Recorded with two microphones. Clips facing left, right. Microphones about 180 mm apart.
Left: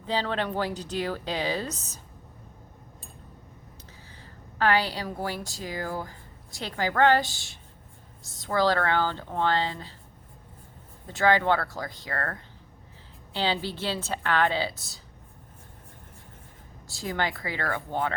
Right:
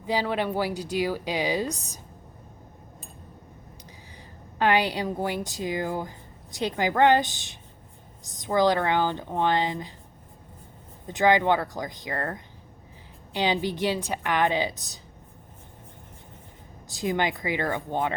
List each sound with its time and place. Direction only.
0.0 s speech: 10° right (ahead or behind)
4.5 s a woman's voice: 20° right (ahead or behind)
11.0 s speech: 15° right (ahead or behind)
16.9 s speech: 20° right (ahead or behind)